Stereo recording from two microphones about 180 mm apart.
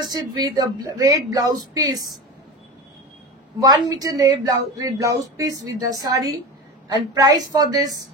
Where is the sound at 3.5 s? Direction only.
20° right (ahead or behind).